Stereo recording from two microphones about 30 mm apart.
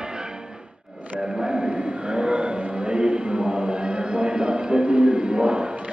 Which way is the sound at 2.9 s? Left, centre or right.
Right.